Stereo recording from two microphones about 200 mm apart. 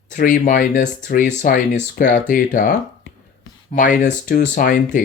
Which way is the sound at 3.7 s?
40° left (ahead or behind).